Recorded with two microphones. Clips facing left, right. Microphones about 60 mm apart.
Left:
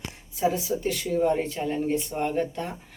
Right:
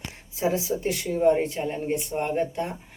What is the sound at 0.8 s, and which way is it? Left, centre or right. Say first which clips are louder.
Speech: even; right.